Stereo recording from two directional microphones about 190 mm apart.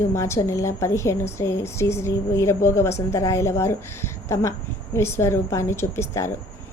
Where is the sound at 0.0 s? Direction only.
15° left (ahead or behind).